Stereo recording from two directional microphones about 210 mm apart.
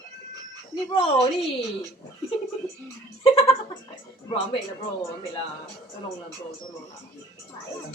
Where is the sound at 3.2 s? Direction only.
25° left (ahead or behind).